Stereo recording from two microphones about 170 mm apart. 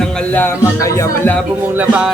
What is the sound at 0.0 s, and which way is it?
Speech, 10° left (ahead or behind).